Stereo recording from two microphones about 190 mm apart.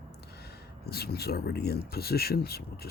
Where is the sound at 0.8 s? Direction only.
55° left (ahead or behind).